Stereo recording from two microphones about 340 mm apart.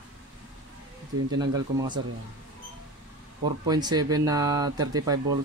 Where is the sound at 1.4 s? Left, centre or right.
Centre.